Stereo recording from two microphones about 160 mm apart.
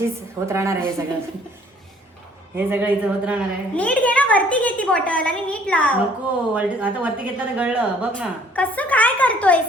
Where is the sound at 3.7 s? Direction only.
10° left (ahead or behind).